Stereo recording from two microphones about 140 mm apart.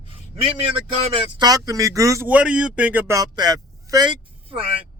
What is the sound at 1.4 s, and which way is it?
Speech, 25° right (ahead or behind).